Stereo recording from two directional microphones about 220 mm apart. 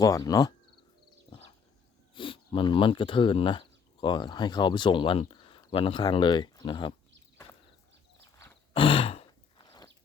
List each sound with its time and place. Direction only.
0.0 s speech: 15° left (ahead or behind)
1.3 s a sound: 25° left (ahead or behind)
2.1 s speech: 25° left (ahead or behind)
8.7 s throat clearing: 25° left (ahead or behind)